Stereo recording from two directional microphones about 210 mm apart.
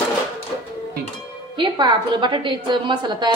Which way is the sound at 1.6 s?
20° right (ahead or behind).